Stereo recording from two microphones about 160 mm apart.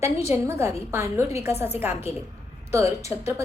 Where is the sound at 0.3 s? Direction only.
15° right (ahead or behind).